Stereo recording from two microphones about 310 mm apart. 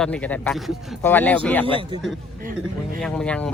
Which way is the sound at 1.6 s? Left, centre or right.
Centre.